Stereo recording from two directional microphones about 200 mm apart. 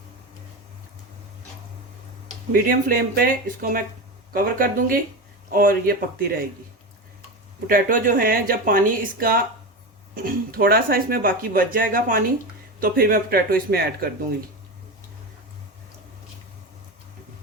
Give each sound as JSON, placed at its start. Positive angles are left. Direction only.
{"t": 2.5, "sound": "speech", "side_deg": -45}
{"t": 7.7, "sound": "speech", "side_deg": -45}